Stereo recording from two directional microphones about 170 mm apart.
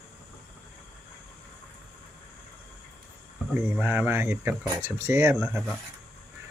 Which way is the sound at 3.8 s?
10° right (ahead or behind).